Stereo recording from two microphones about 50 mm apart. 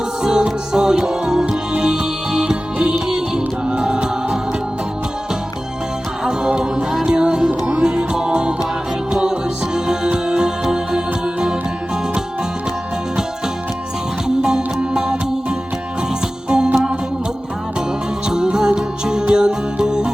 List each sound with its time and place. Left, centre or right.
0.2 s music: centre
6.2 s music: centre
14.3 s music: centre
18.3 s music: centre